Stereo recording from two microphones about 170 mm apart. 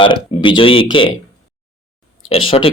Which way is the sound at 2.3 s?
35° left (ahead or behind).